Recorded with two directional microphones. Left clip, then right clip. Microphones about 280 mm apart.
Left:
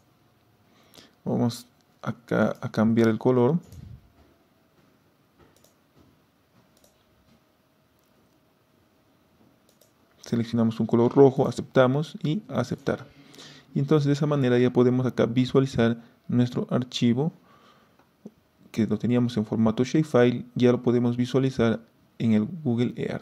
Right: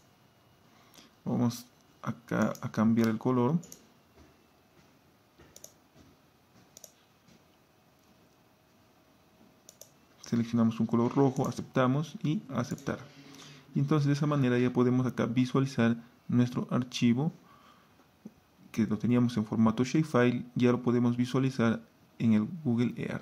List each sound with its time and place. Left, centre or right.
0.9 s speech: centre
10.2 s speech: left